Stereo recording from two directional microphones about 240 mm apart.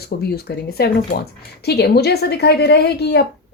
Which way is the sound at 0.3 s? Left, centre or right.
Left.